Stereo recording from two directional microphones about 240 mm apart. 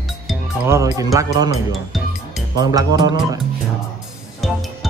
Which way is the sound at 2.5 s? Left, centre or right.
Centre.